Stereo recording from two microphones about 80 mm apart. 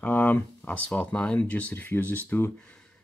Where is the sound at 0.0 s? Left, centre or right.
Left.